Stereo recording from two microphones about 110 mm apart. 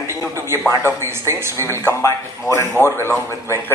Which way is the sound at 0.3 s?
25° right (ahead or behind).